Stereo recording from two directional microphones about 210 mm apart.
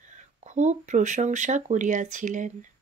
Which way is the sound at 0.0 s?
35° right (ahead or behind).